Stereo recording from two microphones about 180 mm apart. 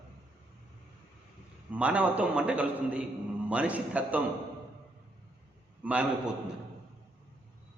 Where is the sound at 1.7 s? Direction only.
5° right (ahead or behind).